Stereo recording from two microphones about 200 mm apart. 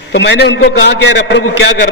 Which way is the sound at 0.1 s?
60° left (ahead or behind).